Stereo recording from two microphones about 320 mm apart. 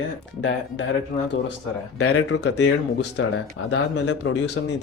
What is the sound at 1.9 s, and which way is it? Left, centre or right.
Speech, left.